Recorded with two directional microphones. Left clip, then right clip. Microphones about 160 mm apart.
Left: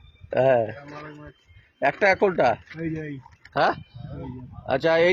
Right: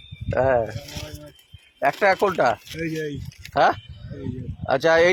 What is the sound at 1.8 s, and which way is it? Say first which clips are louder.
Speech: right 1 dB; 25° left (ahead or behind).